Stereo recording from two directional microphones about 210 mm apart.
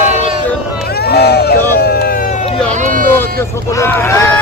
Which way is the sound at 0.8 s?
50° left (ahead or behind).